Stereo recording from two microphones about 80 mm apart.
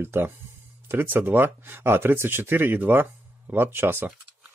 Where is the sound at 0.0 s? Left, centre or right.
Right.